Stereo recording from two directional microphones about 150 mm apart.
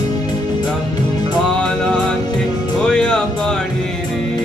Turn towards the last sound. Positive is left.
turn(degrees=5)  # may be behind; listen again after turning